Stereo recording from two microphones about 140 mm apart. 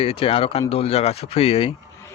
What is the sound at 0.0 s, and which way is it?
Speech, 40° left (ahead or behind).